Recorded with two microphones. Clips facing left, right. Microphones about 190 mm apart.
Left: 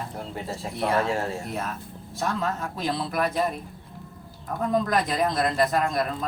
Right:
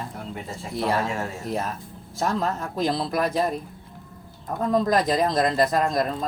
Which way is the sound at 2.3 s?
40° right (ahead or behind).